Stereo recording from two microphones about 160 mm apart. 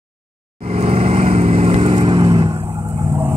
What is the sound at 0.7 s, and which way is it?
Vehicle, 40° right (ahead or behind).